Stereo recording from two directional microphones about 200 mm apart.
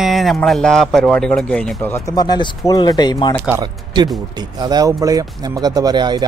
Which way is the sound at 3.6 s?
20° right (ahead or behind).